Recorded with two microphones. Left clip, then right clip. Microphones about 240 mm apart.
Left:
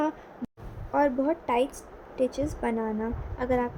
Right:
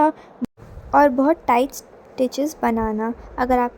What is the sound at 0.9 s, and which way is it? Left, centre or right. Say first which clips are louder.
A woman's voice: right 10 dB; right.